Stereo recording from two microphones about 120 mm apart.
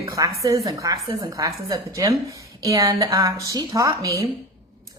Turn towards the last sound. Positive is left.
turn(degrees=-25)  # may be behind; listen again after turning